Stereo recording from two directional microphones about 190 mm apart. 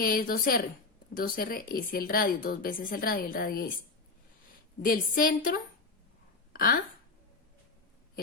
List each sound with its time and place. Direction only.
0.0 s speech: 50° left (ahead or behind)
4.8 s speech: 45° left (ahead or behind)